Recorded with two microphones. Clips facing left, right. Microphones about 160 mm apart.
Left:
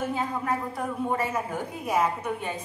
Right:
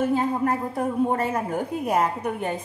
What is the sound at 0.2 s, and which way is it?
A woman's voice, 50° right (ahead or behind).